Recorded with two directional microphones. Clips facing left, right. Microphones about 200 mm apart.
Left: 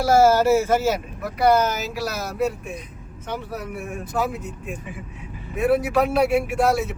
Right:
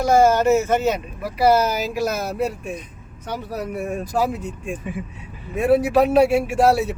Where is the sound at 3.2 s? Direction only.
35° right (ahead or behind).